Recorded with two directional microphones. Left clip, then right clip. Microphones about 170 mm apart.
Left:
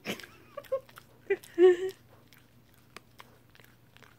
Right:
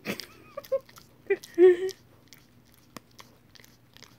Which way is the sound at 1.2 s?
25° right (ahead or behind).